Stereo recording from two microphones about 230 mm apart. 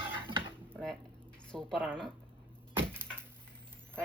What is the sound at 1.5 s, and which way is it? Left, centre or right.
Speech, centre.